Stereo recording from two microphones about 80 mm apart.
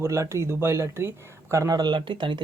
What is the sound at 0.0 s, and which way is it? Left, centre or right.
Speech, right.